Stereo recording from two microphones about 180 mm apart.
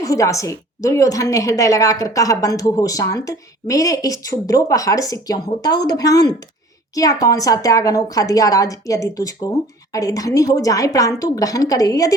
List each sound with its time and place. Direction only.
0.0 s a woman's voice: 15° left (ahead or behind)